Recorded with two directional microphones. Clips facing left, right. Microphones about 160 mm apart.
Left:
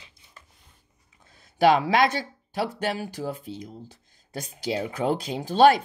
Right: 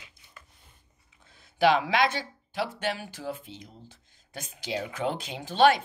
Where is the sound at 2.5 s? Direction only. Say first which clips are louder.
Left 3 dB; 40° left (ahead or behind).